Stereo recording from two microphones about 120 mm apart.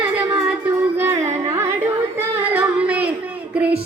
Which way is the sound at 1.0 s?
20° right (ahead or behind).